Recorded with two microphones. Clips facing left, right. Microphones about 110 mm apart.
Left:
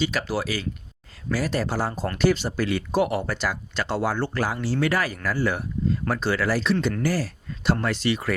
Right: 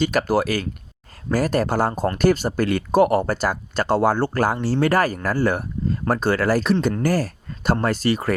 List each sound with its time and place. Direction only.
0.0 s speech: 50° right (ahead or behind)